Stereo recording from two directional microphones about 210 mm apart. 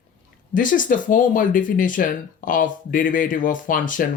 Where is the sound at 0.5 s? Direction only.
40° left (ahead or behind).